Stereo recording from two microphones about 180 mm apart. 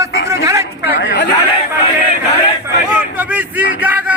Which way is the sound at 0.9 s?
70° left (ahead or behind).